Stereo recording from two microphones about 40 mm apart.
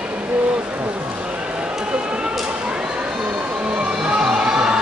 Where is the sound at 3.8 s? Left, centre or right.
Centre.